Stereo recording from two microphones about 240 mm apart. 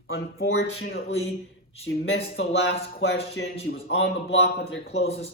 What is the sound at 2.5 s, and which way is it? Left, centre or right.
Speech, left.